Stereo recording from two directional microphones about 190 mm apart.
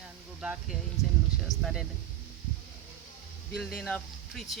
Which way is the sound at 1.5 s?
Centre (ahead or behind).